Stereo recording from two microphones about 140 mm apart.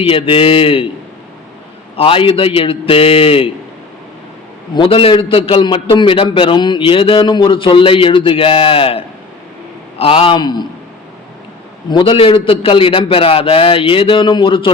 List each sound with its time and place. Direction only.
0.0 s a man's voice: 40° left (ahead or behind)
2.0 s a man's voice: 40° left (ahead or behind)
4.7 s a man's voice: 40° left (ahead or behind)
11.9 s a man's voice: 35° left (ahead or behind)